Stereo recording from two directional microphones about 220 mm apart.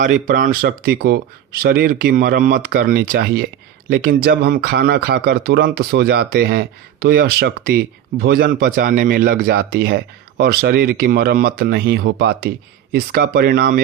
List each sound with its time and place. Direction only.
0.0 s speech: 40° right (ahead or behind)